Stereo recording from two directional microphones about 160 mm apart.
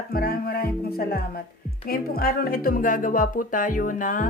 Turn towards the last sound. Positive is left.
turn(degrees=55)  # may be behind; listen again after turning